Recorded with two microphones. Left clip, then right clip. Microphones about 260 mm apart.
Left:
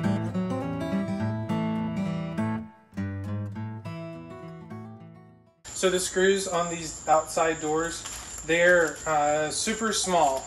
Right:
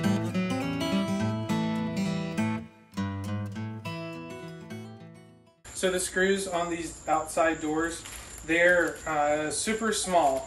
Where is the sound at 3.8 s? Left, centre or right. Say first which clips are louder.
Right 5 dB; right.